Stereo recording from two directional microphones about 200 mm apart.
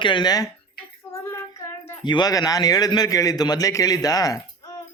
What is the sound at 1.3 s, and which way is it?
Child singing, 10° left (ahead or behind).